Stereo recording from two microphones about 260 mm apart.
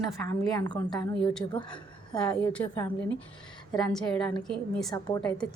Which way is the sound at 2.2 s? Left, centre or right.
Centre.